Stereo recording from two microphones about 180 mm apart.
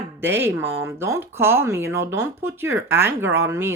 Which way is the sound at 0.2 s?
10° right (ahead or behind).